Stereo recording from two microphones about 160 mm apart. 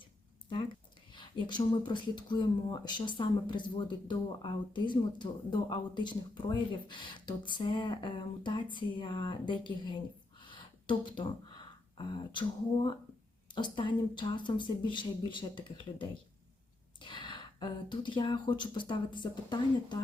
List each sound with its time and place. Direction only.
1.5 s speech: 30° left (ahead or behind)
10.4 s a sound: 30° left (ahead or behind)
11.9 s speech: 30° left (ahead or behind)